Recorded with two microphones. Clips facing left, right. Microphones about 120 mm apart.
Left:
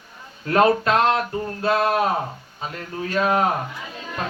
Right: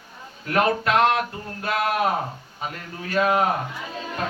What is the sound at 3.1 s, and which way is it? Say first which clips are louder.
Speech: even; 35° left (ahead or behind).